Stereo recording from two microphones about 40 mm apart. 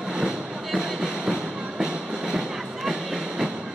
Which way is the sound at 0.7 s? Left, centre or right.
Centre.